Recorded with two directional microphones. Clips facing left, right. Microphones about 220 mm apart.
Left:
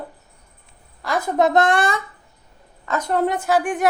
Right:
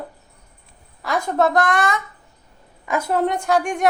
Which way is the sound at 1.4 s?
25° left (ahead or behind).